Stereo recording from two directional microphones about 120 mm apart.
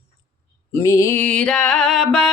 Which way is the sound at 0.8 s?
25° left (ahead or behind).